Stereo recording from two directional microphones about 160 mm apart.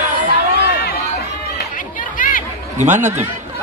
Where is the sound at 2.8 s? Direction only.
50° right (ahead or behind).